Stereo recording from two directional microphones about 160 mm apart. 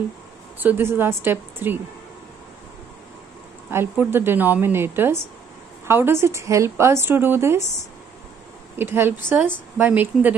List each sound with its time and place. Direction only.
0.6 s a woman's voice: 10° right (ahead or behind)
3.7 s a woman's voice: 10° right (ahead or behind)
8.7 s a woman's voice: 15° right (ahead or behind)